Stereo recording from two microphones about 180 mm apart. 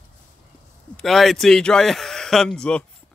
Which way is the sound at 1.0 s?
Centre (ahead or behind).